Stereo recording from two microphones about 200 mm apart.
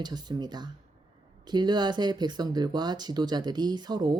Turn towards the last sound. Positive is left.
turn(degrees=-20)  # may be behind; listen again after turning